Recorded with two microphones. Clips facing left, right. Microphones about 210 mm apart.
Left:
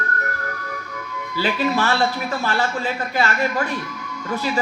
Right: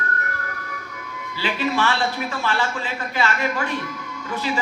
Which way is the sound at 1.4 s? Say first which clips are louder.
Left 2 dB; 40° left (ahead or behind).